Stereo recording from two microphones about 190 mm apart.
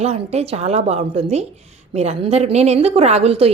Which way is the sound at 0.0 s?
35° right (ahead or behind).